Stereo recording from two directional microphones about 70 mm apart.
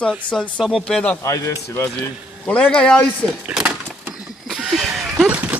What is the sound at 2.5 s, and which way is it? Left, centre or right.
Speech, centre.